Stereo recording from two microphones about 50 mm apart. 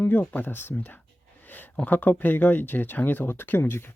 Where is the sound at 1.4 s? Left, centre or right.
Left.